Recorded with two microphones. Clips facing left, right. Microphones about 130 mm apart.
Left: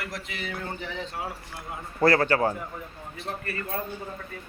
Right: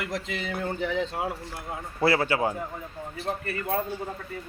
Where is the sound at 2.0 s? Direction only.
10° right (ahead or behind).